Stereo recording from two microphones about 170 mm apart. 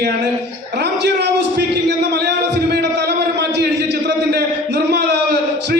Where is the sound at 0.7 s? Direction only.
80° right.